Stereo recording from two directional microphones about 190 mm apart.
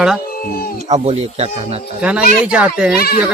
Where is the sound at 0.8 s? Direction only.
35° right (ahead or behind).